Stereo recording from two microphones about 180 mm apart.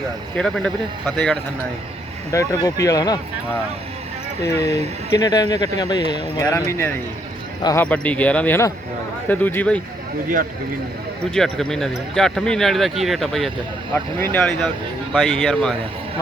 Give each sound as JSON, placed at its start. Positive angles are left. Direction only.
{"t": 0.3, "sound": "speech", "side_deg": 5}
{"t": 2.3, "sound": "speech", "side_deg": 20}
{"t": 5.1, "sound": "speech", "side_deg": 20}
{"t": 7.9, "sound": "speech", "side_deg": 5}
{"t": 11.3, "sound": "speech", "side_deg": 5}
{"t": 13.9, "sound": "speech", "side_deg": 10}
{"t": 15.1, "sound": "speech", "side_deg": 0}